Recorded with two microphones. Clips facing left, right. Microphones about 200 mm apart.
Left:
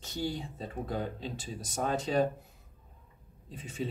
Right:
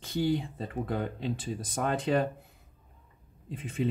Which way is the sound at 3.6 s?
55° right (ahead or behind).